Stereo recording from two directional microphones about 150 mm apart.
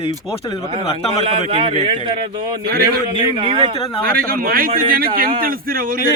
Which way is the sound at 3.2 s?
30° right (ahead or behind).